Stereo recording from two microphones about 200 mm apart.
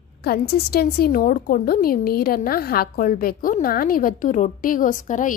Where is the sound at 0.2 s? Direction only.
50° left (ahead or behind).